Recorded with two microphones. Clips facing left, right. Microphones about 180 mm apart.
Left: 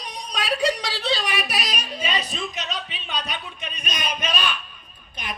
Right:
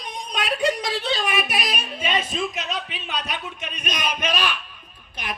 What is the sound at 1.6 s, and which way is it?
A woman's voice, centre (ahead or behind).